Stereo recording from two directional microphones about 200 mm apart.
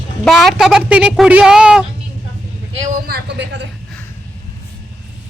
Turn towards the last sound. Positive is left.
turn(degrees=-60)  # may be behind; listen again after turning